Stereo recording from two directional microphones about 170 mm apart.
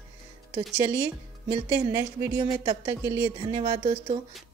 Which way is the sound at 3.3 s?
30° right (ahead or behind).